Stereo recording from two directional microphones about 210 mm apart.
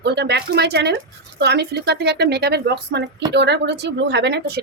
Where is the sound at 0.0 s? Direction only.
55° right (ahead or behind).